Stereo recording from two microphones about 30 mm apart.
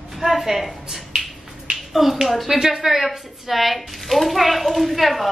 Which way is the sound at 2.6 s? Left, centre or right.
Centre.